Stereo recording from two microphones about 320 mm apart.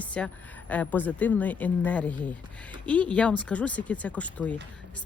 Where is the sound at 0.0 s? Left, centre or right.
Centre.